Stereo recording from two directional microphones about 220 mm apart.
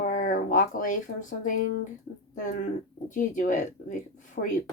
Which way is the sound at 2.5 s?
35° left (ahead or behind).